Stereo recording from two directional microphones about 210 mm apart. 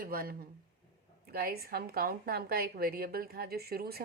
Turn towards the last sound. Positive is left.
turn(degrees=-45)  # may be behind; listen again after turning